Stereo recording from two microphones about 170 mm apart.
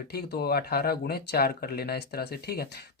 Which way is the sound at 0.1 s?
70° left (ahead or behind).